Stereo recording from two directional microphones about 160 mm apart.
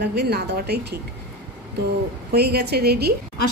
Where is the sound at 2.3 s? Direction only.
90° right.